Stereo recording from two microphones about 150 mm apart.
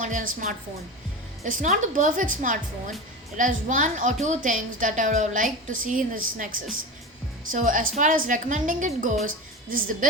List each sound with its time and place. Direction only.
0.0 s a woman's voice: 60° right (ahead or behind)